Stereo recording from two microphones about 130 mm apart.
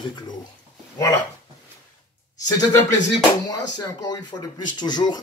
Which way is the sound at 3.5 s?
30° left (ahead or behind).